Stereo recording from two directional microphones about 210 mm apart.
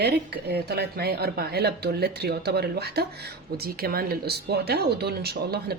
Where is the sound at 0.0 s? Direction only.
50° right (ahead or behind).